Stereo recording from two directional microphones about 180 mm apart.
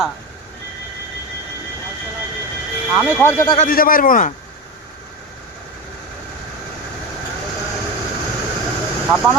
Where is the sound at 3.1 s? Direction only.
15° left (ahead or behind).